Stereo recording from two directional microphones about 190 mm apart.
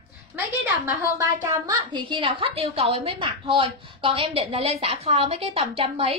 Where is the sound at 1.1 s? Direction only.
15° right (ahead or behind).